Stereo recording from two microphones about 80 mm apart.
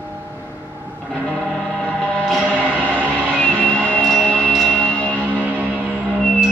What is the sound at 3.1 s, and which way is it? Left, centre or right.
Music, centre.